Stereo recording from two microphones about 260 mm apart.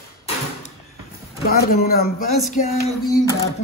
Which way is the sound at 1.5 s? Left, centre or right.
Left.